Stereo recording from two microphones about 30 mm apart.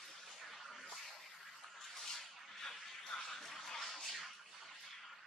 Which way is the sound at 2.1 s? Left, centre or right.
Centre.